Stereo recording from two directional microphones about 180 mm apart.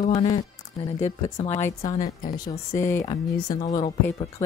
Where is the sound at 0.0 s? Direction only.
35° left (ahead or behind).